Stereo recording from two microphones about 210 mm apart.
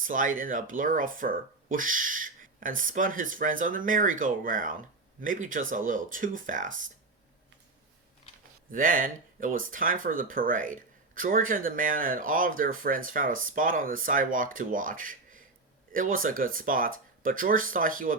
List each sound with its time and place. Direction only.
0.0 s speech: 40° right (ahead or behind)
8.7 s speech: 40° right (ahead or behind)